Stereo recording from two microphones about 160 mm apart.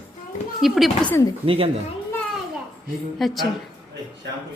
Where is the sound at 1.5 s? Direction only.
35° right (ahead or behind).